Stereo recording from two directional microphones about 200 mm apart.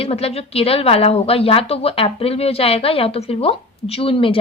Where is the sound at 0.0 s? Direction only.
30° left (ahead or behind).